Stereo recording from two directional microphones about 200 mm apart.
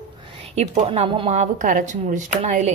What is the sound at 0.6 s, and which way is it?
Speech, 30° right (ahead or behind).